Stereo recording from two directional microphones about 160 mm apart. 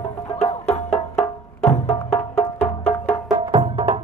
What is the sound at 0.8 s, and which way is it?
Music, 5° left (ahead or behind).